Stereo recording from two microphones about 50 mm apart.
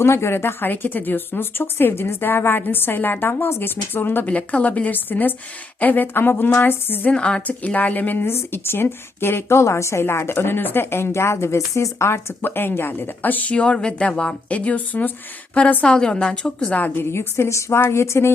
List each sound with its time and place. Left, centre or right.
0.0 s speech: left
4.3 s a woman's voice: left
7.1 s a woman's voice: left
7.4 s speech: left
8.2 s a woman's voice: left
12.5 s speech: left
13.5 s a woman's voice: left
15.8 s a woman's voice: centre
17.0 s a woman's voice: left